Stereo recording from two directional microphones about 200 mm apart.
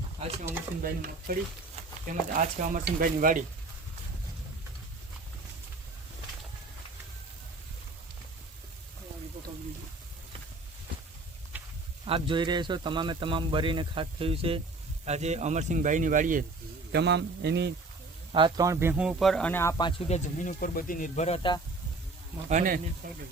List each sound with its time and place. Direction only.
0.8 s speech: 45° right (ahead or behind)
11.5 s a sound: 10° right (ahead or behind)
12.0 s speech: 25° right (ahead or behind); by 16.4 s 40° right (ahead or behind)
16.9 s a man's voice: 60° right (ahead or behind)
18.3 s speech: 25° right (ahead or behind); by 19.9 s 15° left (ahead or behind)
20.1 s speech: 35° left (ahead or behind)
22.4 s speech: 40° right (ahead or behind)